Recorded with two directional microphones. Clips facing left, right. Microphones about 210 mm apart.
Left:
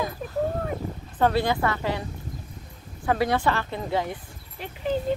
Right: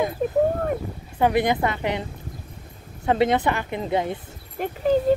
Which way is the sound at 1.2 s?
20° right (ahead or behind).